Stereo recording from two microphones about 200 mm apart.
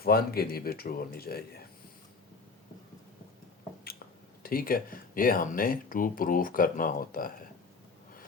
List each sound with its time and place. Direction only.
0.0 s speech: 50° left (ahead or behind)
4.4 s speech: 45° left (ahead or behind)